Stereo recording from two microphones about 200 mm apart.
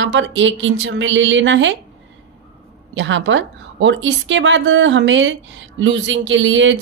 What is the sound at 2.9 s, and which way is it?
A woman's voice, 65° right (ahead or behind).